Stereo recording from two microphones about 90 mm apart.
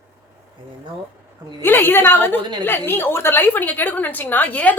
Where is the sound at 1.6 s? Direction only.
25° left (ahead or behind).